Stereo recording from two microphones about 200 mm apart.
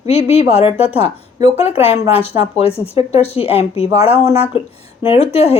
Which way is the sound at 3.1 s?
30° left (ahead or behind).